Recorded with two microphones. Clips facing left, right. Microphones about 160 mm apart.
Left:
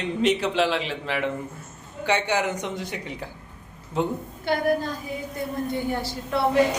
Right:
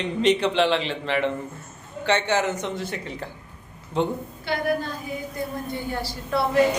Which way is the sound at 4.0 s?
5° left (ahead or behind).